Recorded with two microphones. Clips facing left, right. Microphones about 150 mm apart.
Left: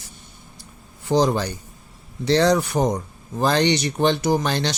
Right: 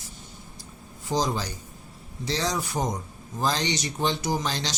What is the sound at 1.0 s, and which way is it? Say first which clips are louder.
Speech: left 8 dB; 65° left (ahead or behind).